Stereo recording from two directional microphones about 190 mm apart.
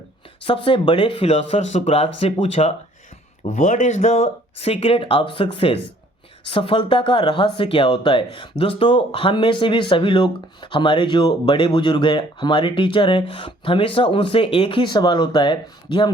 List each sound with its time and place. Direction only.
0.4 s speech: 25° left (ahead or behind)